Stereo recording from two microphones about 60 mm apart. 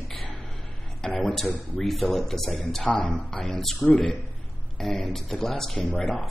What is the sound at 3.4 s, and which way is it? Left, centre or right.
Speech, centre.